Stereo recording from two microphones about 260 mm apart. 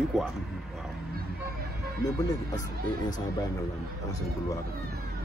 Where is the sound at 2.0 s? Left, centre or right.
Centre.